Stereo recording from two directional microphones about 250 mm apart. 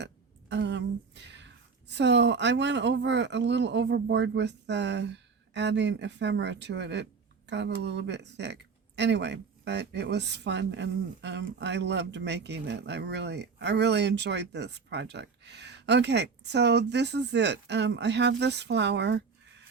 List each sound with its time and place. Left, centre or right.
0.0 s a woman's voice: right